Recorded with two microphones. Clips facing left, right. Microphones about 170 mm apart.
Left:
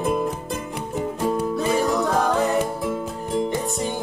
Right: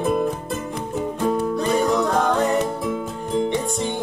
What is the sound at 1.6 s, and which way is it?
Music, centre (ahead or behind).